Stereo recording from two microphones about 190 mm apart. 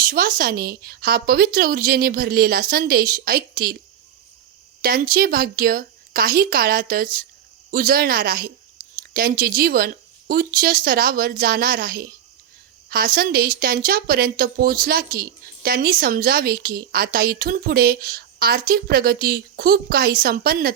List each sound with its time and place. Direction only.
0.0 s a woman's voice: 45° right (ahead or behind)
4.8 s a woman's voice: 50° right (ahead or behind)